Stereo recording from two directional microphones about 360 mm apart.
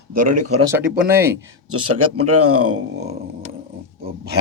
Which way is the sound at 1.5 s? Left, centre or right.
Right.